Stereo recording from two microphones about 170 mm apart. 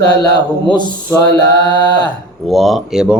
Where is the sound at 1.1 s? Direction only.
15° left (ahead or behind).